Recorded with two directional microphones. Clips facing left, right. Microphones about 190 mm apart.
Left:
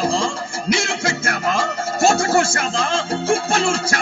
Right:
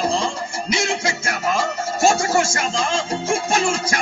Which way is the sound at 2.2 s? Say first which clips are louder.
Left 2 dB; 55° left (ahead or behind).